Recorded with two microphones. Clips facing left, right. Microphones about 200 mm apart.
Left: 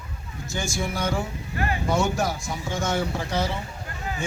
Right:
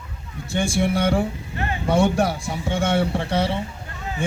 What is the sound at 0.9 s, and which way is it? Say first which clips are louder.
Speech: right 6 dB; 30° right (ahead or behind).